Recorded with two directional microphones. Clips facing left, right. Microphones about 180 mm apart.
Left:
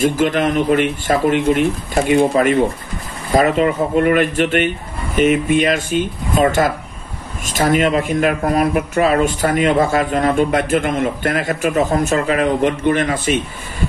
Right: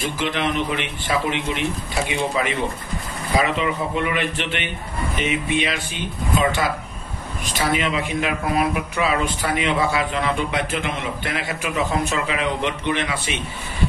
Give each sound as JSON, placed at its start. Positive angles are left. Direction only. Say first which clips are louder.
{"t": 0.0, "sound": "speech", "louder": "left 8 dB", "side_deg": 45}